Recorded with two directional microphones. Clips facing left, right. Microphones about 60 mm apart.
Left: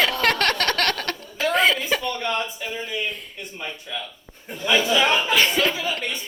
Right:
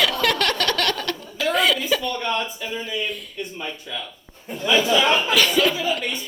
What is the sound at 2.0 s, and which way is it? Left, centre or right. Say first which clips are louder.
Speech: right 1 dB; centre.